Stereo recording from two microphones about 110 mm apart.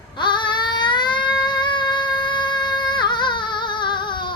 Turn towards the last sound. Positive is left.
turn(degrees=45)  # may be behind; listen again after turning